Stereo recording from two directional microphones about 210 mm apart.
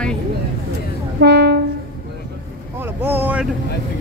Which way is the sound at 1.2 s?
55° right (ahead or behind).